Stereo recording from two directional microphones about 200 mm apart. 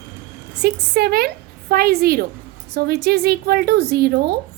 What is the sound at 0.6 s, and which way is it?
A woman's voice, 55° right (ahead or behind).